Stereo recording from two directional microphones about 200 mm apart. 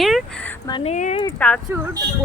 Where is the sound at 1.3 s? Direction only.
5° left (ahead or behind).